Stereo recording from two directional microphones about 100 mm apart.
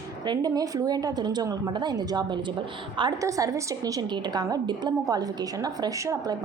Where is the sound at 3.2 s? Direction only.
35° right (ahead or behind).